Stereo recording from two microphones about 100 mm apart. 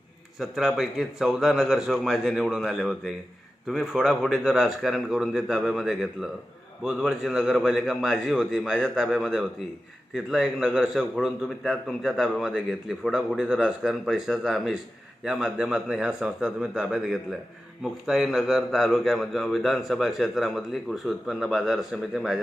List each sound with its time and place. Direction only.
0.3 s a man's voice: 5° right (ahead or behind)